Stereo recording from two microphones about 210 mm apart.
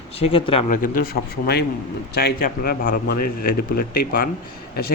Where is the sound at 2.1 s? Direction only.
45° left (ahead or behind).